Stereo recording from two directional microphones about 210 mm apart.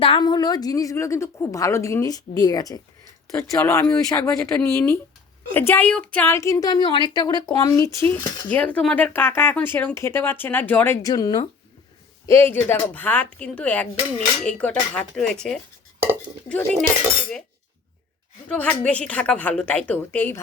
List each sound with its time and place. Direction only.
0.0 s speech: 25° left (ahead or behind); by 16.8 s 5° left (ahead or behind)
18.4 s speech: 5° left (ahead or behind)